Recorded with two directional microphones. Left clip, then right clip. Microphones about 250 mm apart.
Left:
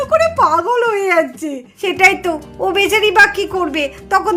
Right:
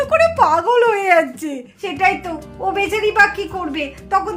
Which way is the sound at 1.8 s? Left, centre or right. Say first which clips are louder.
Left 5 dB; left.